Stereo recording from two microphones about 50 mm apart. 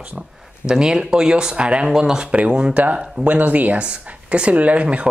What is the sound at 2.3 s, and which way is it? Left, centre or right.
Speech, right.